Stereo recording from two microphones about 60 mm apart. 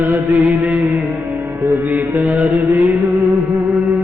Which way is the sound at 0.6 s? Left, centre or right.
Right.